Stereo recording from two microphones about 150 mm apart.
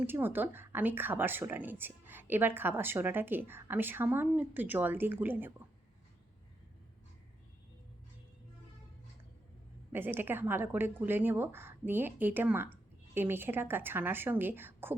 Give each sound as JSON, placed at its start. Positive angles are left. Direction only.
{"t": 0.0, "sound": "speech", "side_deg": -15}
{"t": 9.9, "sound": "speech", "side_deg": -15}